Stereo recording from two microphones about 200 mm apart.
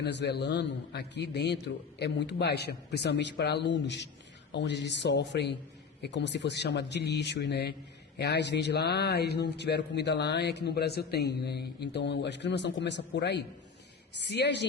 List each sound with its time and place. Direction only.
0.0 s speech: 60° left (ahead or behind)